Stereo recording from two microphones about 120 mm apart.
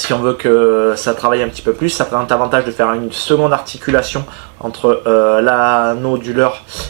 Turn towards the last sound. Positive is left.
turn(degrees=-15)  # may be behind; listen again after turning